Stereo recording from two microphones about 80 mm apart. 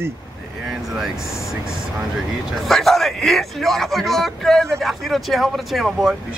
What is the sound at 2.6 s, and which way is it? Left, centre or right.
Speech, centre.